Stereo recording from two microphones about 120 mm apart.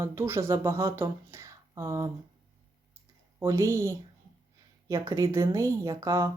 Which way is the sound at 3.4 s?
25° right (ahead or behind).